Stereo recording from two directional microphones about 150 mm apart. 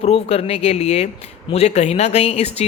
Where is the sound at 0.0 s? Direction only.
40° left (ahead or behind).